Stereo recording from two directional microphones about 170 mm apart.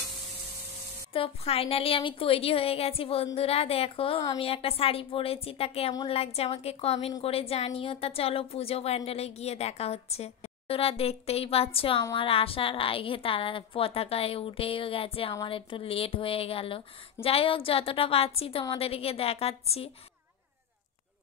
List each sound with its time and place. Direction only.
1.1 s a woman's voice: 35° left (ahead or behind)